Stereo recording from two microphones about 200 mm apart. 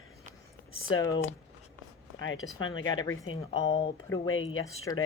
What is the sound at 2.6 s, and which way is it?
Speech, 80° left.